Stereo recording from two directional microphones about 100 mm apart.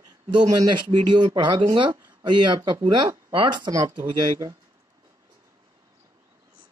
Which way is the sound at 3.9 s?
55° right (ahead or behind).